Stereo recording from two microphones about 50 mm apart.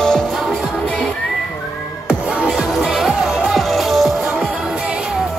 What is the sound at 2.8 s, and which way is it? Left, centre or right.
Music, centre.